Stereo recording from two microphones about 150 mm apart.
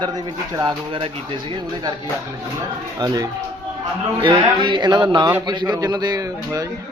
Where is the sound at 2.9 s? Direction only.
25° right (ahead or behind).